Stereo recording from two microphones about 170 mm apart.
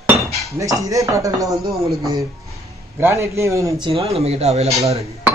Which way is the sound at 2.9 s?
15° right (ahead or behind).